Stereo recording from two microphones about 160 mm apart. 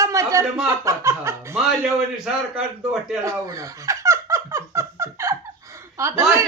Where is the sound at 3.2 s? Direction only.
20° right (ahead or behind).